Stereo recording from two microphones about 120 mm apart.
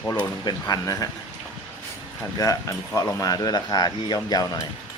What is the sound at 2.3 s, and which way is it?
Speech, 30° left (ahead or behind).